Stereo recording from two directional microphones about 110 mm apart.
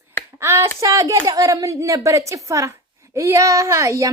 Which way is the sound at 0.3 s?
25° right (ahead or behind).